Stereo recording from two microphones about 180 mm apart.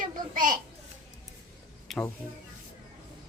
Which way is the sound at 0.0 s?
45° right (ahead or behind).